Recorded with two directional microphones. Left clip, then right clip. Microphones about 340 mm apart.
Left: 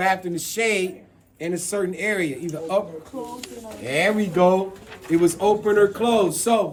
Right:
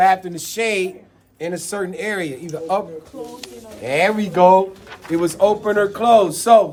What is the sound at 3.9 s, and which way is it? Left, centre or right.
Speech, centre.